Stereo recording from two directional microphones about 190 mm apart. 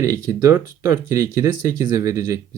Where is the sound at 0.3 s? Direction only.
15° right (ahead or behind).